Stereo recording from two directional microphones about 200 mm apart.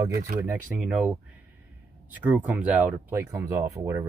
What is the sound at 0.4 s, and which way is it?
Speech, 10° right (ahead or behind).